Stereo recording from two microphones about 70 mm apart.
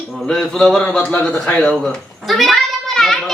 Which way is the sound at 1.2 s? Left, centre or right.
Centre.